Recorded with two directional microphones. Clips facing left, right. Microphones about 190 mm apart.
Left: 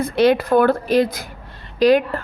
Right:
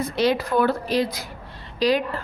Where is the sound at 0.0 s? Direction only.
55° left (ahead or behind).